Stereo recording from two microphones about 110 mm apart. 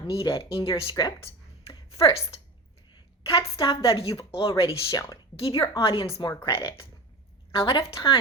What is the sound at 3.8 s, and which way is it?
Speech, 55° left (ahead or behind).